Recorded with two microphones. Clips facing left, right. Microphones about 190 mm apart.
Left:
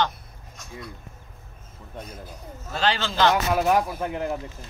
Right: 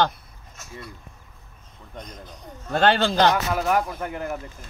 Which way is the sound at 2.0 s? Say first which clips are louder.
Left 1 dB; 5° left (ahead or behind).